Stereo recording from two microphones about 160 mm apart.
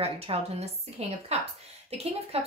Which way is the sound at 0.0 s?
40° right (ahead or behind).